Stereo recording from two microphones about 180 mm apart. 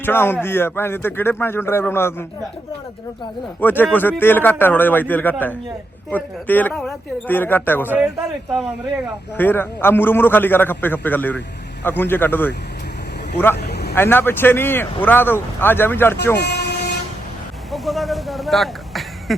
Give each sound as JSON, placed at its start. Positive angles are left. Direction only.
{"t": 0.0, "sound": "a man's voice", "side_deg": 10}
{"t": 3.6, "sound": "a man's voice", "side_deg": 10}
{"t": 9.4, "sound": "a man's voice", "side_deg": 10}
{"t": 13.6, "sound": "vehicle", "side_deg": 65}
{"t": 13.9, "sound": "a man's voice", "side_deg": 10}
{"t": 16.4, "sound": "vehicle", "side_deg": 65}
{"t": 17.7, "sound": "speech", "side_deg": 0}